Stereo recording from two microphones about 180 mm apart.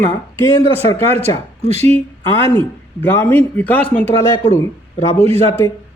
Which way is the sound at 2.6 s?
10° left (ahead or behind).